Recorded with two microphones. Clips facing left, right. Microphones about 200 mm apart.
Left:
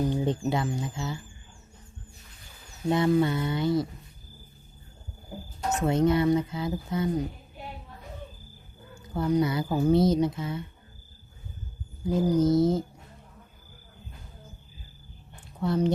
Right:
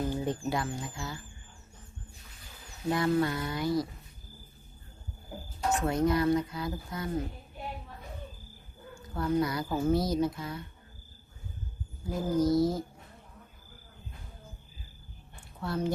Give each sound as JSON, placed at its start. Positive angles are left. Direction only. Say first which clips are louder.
{"t": 0.1, "sound": "speech", "louder": "left 4 dB", "side_deg": 25}
{"t": 2.9, "sound": "speech", "louder": "left 4 dB", "side_deg": 25}
{"t": 5.7, "sound": "speech", "louder": "left 4 dB", "side_deg": 25}
{"t": 9.0, "sound": "speech", "louder": "left 4 dB", "side_deg": 20}
{"t": 12.1, "sound": "speech", "louder": "left 4 dB", "side_deg": 20}
{"t": 15.6, "sound": "speech", "louder": "left 7 dB", "side_deg": 20}